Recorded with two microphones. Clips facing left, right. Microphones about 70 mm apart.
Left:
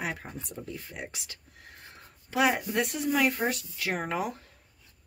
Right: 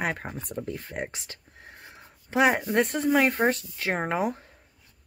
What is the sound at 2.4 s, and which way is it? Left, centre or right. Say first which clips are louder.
Speech: right 4 dB; right.